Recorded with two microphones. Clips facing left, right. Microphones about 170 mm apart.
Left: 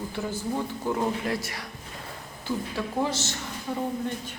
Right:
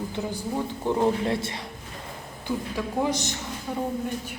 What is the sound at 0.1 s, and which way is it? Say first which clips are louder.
Speech: even; 15° right (ahead or behind).